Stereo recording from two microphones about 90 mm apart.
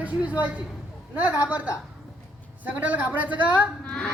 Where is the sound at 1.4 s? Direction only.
15° right (ahead or behind).